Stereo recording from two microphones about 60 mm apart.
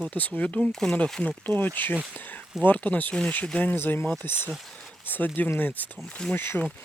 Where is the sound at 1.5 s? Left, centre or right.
Left.